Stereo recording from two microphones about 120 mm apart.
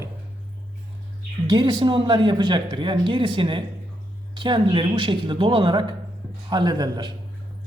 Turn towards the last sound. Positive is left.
turn(degrees=-35)  # may be behind; listen again after turning